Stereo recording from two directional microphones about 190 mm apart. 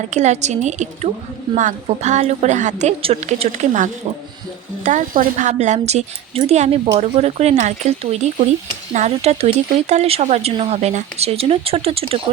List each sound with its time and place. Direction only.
0.1 s a woman's voice: 35° right (ahead or behind)
4.9 s a woman's voice: 45° right (ahead or behind)